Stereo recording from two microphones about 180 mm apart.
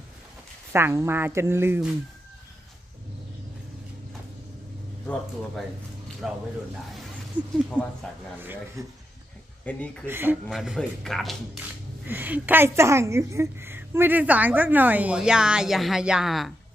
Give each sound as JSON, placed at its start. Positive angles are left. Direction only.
{"t": 0.7, "sound": "a woman's voice", "side_deg": -15}
{"t": 6.2, "sound": "a woman's voice", "side_deg": 0}
{"t": 8.8, "sound": "a woman's voice", "side_deg": -15}
{"t": 9.6, "sound": "speech", "side_deg": 5}
{"t": 10.1, "sound": "a woman's voice", "side_deg": -10}
{"t": 12.0, "sound": "a woman's voice", "side_deg": -10}